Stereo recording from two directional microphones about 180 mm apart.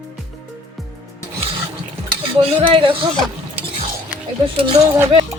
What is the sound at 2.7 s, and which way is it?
Speech, 25° right (ahead or behind).